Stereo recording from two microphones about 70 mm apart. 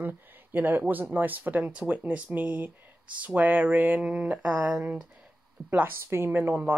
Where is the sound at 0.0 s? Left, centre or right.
Right.